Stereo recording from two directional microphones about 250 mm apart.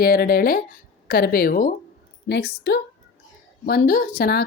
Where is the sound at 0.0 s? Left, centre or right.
Left.